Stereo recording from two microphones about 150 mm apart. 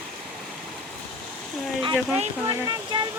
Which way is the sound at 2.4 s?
25° right (ahead or behind).